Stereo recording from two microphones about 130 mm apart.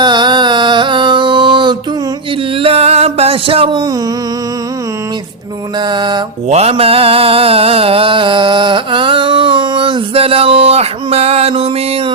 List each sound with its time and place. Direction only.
0.0 s a sound: 35° right (ahead or behind)
2.6 s music: 45° right (ahead or behind)
5.9 s mantra: 35° right (ahead or behind)
6.5 s mantra: 55° right (ahead or behind)